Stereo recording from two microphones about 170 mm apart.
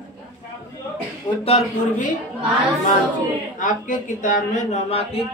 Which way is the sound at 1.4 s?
40° left (ahead or behind).